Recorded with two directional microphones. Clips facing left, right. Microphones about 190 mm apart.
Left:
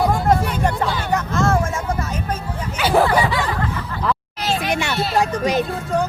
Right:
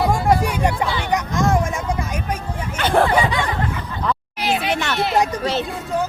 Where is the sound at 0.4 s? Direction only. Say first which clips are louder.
Even; 10° right (ahead or behind).